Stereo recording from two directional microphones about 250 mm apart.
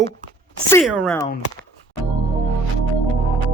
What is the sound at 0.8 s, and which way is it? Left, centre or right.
Speech, centre.